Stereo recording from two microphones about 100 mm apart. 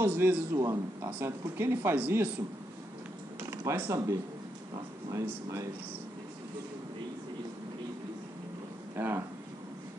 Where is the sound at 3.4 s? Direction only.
25° right (ahead or behind).